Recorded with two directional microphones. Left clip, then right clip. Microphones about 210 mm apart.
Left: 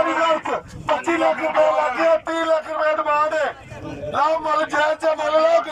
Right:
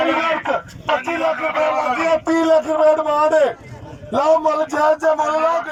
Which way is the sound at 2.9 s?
20° right (ahead or behind).